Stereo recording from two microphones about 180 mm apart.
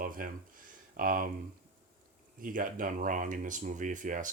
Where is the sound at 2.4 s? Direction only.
50° right (ahead or behind).